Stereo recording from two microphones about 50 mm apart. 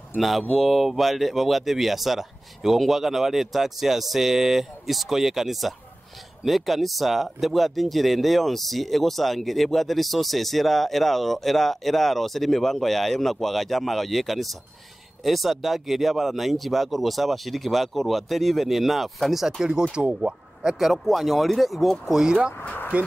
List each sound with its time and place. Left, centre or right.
0.2 s speech: centre
19.6 s speech: centre
20.8 s speech: centre
22.0 s speech: centre
22.9 s speech: right